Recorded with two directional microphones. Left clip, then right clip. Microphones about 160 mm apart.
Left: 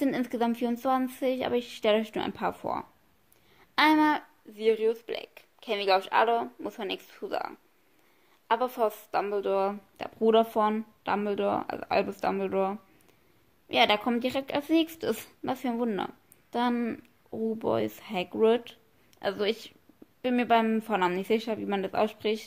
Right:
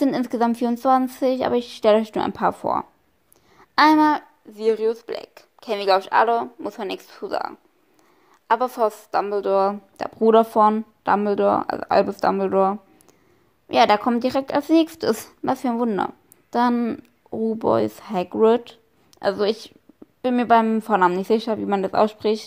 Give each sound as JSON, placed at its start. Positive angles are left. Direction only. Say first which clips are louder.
{"t": 0.0, "sound": "a woman's voice", "louder": "right 8 dB", "side_deg": -25}